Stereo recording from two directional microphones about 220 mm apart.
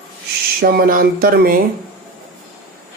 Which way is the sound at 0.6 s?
45° right (ahead or behind).